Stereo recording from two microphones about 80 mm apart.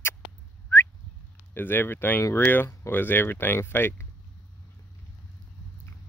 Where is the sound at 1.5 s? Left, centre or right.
Left.